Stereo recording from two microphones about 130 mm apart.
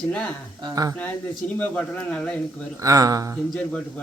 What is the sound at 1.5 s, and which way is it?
Speech, 10° left (ahead or behind).